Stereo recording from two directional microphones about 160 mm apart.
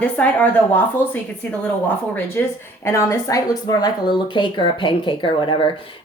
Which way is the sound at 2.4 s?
15° left (ahead or behind).